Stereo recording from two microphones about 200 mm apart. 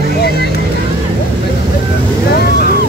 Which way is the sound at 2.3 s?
50° left (ahead or behind).